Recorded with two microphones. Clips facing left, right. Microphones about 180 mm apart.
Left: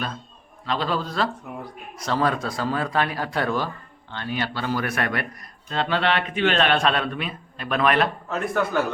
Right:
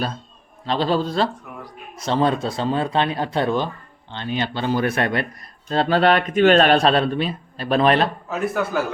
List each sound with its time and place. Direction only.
0.6 s speech: 30° right (ahead or behind)
5.6 s speech: 40° right (ahead or behind)
8.3 s a man's voice: 5° right (ahead or behind)